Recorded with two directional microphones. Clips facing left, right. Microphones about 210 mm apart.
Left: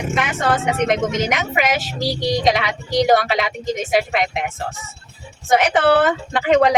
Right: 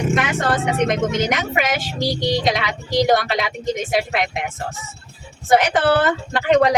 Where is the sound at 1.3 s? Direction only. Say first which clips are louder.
Left 1 dB; centre (ahead or behind).